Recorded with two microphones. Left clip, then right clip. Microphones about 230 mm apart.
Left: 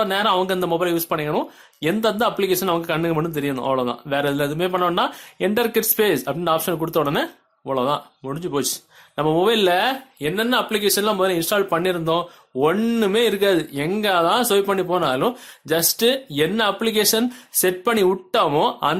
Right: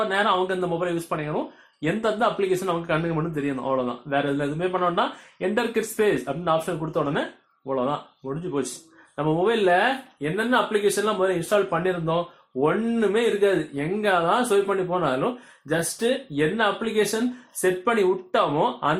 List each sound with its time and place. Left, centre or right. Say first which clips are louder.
0.1 s speech: left 3 dB; left